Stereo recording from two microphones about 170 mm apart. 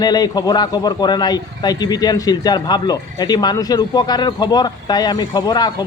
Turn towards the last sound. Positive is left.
turn(degrees=25)  # may be behind; listen again after turning